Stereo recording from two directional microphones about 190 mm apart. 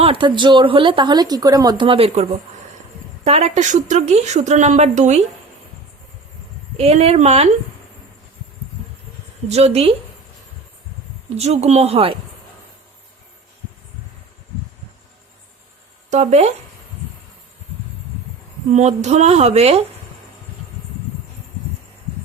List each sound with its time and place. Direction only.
0.0 s a woman's voice: 25° right (ahead or behind)
6.7 s speech: 35° right (ahead or behind)
9.5 s speech: 35° right (ahead or behind)
11.3 s speech: 35° right (ahead or behind)
16.0 s speech: 35° right (ahead or behind)
18.7 s speech: 35° right (ahead or behind)